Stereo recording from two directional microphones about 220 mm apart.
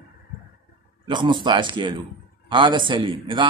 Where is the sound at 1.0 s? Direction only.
20° right (ahead or behind).